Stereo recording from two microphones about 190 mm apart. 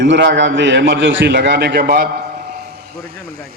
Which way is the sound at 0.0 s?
70° right (ahead or behind).